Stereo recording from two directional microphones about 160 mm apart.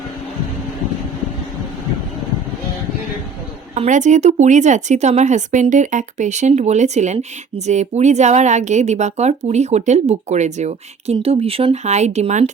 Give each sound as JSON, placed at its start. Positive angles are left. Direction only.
{"t": 3.8, "sound": "a woman's voice", "side_deg": -50}